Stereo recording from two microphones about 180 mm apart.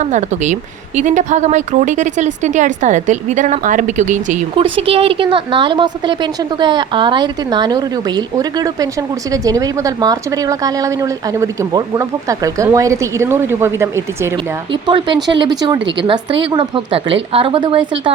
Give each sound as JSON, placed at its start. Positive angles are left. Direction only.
{"t": 0.0, "sound": "speech", "side_deg": -40}
{"t": 4.6, "sound": "a woman's voice", "side_deg": -30}
{"t": 14.7, "sound": "a woman's voice", "side_deg": -25}